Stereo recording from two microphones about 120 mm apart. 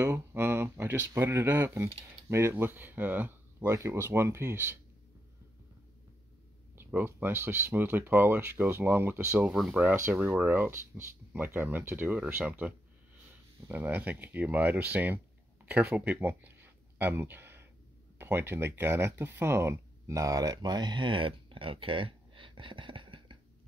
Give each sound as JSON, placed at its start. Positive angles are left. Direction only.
{"t": 0.0, "sound": "speech", "side_deg": -20}
{"t": 6.7, "sound": "speech", "side_deg": -20}
{"t": 9.5, "sound": "speech", "side_deg": -5}
{"t": 15.6, "sound": "a sound", "side_deg": -15}
{"t": 18.1, "sound": "speech", "side_deg": -20}